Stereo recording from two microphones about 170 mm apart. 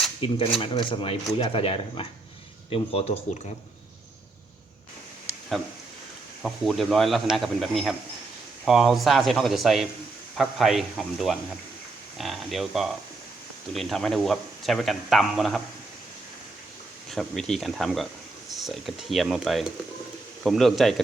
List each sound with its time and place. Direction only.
0.2 s speech: 30° left (ahead or behind)
6.4 s speech: centre (ahead or behind)
17.1 s speech: centre (ahead or behind)